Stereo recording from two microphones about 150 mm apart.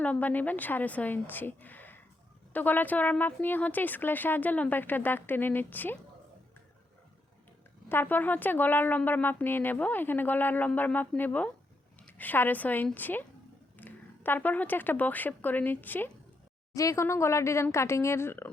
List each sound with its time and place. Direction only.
0.0 s a woman's voice: 10° left (ahead or behind)
7.9 s a woman's voice: 15° left (ahead or behind)